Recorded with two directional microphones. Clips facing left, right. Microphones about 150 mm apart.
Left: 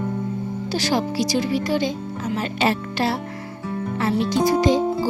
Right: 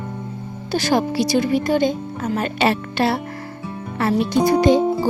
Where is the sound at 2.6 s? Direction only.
65° right (ahead or behind).